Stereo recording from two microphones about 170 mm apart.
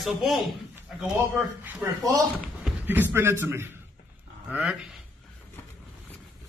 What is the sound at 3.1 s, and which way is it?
Speech, 15° right (ahead or behind).